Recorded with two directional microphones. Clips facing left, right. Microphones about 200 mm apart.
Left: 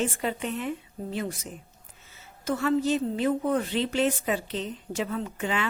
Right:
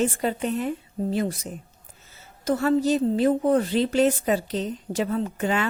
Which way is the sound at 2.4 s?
40° right (ahead or behind).